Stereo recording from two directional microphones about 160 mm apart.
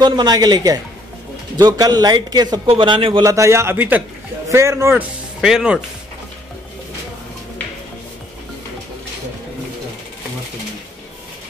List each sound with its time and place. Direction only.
0.0 s a man's voice: 25° right (ahead or behind)
3.3 s a man's voice: 20° right (ahead or behind)
5.4 s speech: 5° right (ahead or behind)